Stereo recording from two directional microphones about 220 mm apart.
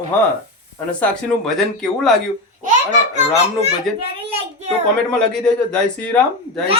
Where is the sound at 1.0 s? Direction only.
Centre (ahead or behind).